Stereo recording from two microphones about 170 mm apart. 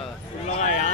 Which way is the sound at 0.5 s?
45° left (ahead or behind).